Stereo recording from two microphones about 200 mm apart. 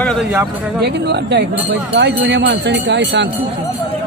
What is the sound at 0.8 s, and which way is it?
Speech, 60° right (ahead or behind).